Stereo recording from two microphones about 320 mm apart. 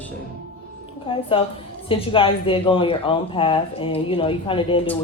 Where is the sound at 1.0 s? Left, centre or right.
Centre.